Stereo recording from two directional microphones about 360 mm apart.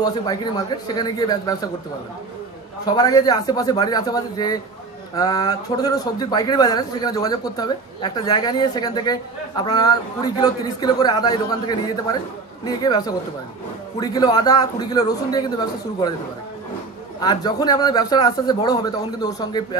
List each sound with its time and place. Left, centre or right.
0.0 s a man's voice: centre
2.8 s a man's voice: centre
17.2 s a man's voice: centre